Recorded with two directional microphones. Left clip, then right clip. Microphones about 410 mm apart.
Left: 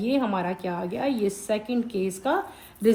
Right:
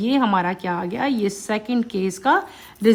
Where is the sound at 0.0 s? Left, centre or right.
Centre.